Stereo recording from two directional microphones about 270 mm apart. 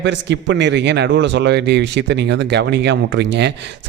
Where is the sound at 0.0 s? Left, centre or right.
Right.